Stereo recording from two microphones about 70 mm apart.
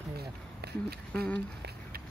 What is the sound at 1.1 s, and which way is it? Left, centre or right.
Speech, left.